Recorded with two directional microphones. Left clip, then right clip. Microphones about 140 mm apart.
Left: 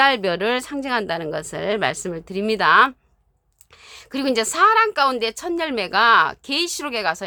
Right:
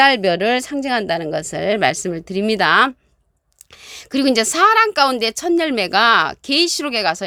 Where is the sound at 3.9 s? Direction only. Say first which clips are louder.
Right 5 dB; 50° right (ahead or behind).